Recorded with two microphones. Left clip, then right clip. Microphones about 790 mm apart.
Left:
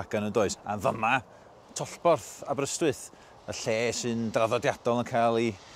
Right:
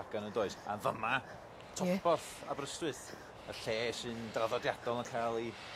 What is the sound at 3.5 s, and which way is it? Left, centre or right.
Speech, left.